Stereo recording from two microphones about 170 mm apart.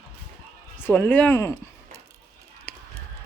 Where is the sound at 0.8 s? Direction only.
10° left (ahead or behind).